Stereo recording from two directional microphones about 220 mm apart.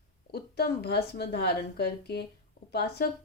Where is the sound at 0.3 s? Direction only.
45° left (ahead or behind).